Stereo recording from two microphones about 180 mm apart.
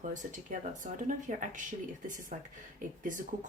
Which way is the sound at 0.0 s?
45° right (ahead or behind).